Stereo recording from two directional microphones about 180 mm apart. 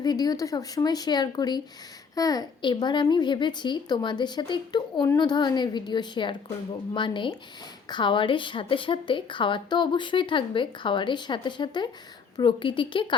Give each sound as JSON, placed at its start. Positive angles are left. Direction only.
{"t": 0.0, "sound": "a woman's voice", "side_deg": 20}